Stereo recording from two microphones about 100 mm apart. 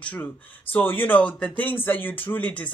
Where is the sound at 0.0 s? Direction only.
15° left (ahead or behind).